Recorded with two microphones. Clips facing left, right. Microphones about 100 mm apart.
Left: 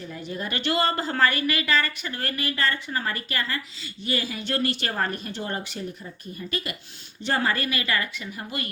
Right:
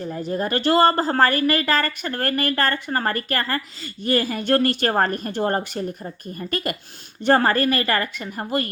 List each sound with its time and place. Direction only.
0.0 s a woman's voice: 40° right (ahead or behind)
7.3 s a woman's voice: 50° right (ahead or behind)